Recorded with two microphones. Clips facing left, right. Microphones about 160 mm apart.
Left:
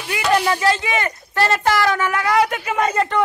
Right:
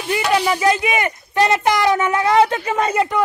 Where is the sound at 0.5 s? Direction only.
15° right (ahead or behind).